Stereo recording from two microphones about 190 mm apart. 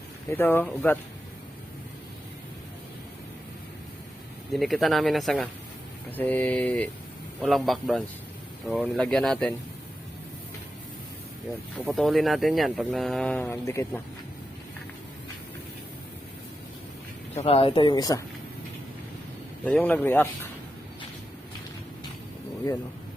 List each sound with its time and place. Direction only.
0.3 s speech: 10° left (ahead or behind)
4.5 s speech: centre (ahead or behind)
11.9 s speech: centre (ahead or behind)
17.3 s speech: 30° left (ahead or behind)
19.6 s speech: 10° left (ahead or behind)